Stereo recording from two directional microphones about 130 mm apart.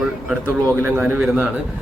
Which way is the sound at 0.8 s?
10° right (ahead or behind).